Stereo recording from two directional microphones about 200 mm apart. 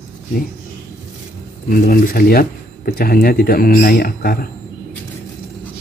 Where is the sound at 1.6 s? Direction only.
45° left (ahead or behind).